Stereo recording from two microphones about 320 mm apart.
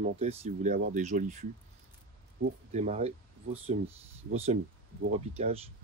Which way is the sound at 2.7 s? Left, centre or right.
Centre.